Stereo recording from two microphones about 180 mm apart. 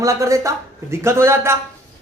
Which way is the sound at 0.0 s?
15° right (ahead or behind).